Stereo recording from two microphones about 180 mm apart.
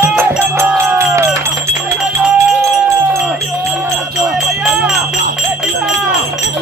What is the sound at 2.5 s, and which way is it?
Music, centre (ahead or behind).